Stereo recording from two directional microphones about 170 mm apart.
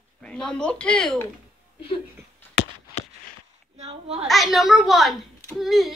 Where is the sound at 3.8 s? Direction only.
35° right (ahead or behind).